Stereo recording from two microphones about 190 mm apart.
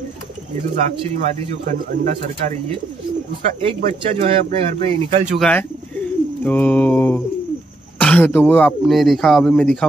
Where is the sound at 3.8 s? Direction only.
45° right (ahead or behind).